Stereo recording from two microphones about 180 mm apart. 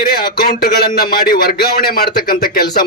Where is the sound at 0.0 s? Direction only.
60° left (ahead or behind).